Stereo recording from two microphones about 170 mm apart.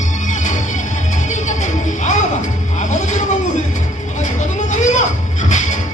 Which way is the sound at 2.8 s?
45° left (ahead or behind).